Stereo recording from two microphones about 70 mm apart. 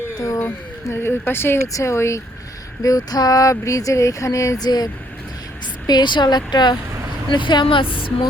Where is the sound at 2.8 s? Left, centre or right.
Left.